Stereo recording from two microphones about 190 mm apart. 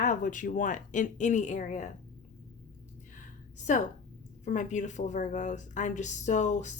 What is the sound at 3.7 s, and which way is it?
Speech, 40° left (ahead or behind).